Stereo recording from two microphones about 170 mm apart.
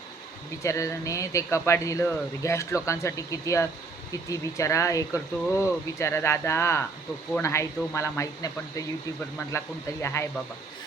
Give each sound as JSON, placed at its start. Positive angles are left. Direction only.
{"t": 0.6, "sound": "speech", "side_deg": 20}